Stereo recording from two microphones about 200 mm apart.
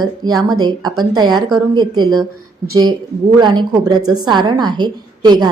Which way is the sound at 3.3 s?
20° right (ahead or behind).